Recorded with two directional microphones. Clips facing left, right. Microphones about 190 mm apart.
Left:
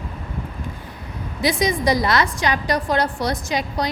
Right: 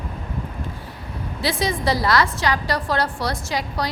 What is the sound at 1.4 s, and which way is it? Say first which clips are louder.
A woman's voice: left 3 dB; 15° left (ahead or behind).